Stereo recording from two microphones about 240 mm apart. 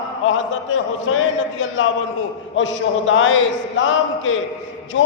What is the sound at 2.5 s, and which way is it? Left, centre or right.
A man's voice, left.